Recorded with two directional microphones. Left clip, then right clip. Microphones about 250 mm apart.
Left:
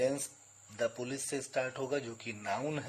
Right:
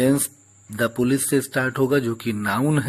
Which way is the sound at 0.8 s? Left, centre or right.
Centre.